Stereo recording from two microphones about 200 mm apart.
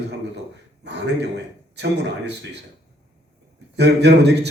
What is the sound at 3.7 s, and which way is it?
Speech, 60° right (ahead or behind).